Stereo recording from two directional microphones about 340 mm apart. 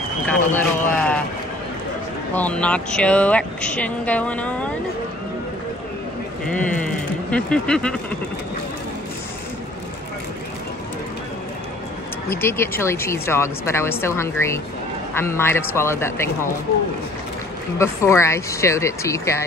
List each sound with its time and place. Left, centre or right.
0.3 s speech: centre
2.3 s speech: centre
6.4 s speech: centre
12.3 s speech: centre
17.7 s speech: centre